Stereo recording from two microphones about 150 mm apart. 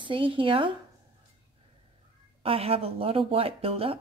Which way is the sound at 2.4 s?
40° right (ahead or behind).